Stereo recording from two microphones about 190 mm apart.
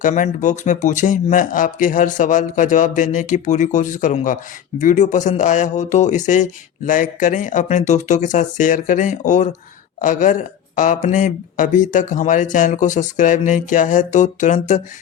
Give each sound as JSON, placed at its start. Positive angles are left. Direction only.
{"t": 0.0, "sound": "speech", "side_deg": 40}